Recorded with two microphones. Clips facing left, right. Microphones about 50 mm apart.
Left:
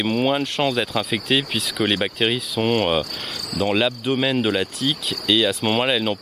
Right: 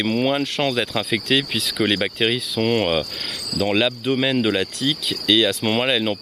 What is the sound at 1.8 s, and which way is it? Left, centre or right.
Speech, centre.